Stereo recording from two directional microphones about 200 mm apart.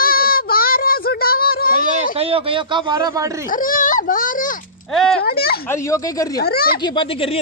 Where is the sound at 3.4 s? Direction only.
45° left (ahead or behind).